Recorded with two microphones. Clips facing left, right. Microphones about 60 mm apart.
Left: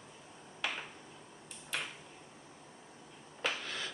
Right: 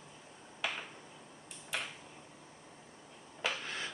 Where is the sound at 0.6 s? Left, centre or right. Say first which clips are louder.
Even; centre.